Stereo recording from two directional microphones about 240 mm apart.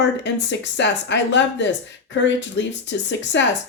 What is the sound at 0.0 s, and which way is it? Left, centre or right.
Speech, left.